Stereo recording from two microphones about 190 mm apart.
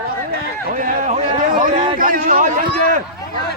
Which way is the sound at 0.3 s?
45° right (ahead or behind).